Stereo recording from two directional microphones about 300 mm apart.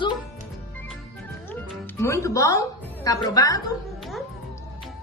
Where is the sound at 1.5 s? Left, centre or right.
Centre.